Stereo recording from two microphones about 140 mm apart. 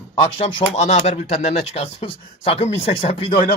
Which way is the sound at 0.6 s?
55° left (ahead or behind).